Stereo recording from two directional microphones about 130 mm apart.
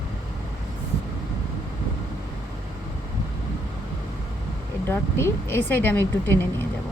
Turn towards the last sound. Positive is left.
turn(degrees=15)  # may be behind; listen again after turning